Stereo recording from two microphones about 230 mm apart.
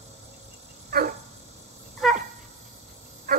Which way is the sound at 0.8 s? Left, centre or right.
Right.